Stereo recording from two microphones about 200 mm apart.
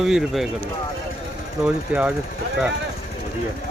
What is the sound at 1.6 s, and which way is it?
Speech, 5° right (ahead or behind).